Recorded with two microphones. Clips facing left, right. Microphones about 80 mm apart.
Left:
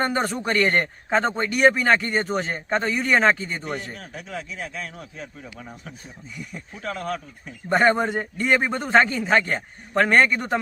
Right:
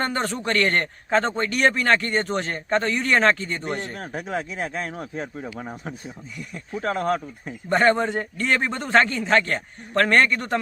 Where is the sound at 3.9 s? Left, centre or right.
Right.